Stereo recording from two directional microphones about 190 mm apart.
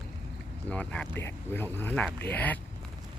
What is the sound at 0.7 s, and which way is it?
Speech, 5° left (ahead or behind).